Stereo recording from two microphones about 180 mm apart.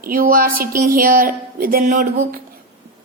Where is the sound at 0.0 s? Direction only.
50° right (ahead or behind).